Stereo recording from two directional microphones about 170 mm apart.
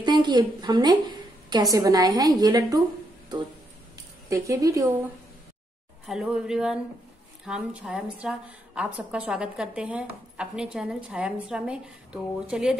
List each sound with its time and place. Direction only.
0.0 s a woman's voice: 25° right (ahead or behind)
4.3 s a woman's voice: 20° right (ahead or behind)
6.0 s a woman's voice: centre (ahead or behind)